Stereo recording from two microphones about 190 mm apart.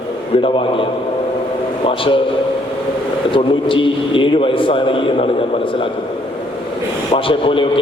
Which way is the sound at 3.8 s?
25° left (ahead or behind).